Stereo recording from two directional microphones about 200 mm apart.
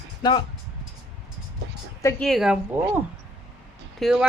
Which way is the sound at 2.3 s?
Centre (ahead or behind).